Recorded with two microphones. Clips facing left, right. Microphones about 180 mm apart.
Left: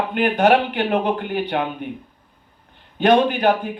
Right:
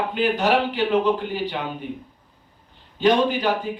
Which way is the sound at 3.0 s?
60° left (ahead or behind).